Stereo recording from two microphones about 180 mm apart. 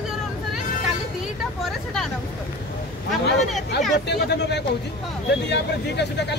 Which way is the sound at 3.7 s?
65° left (ahead or behind).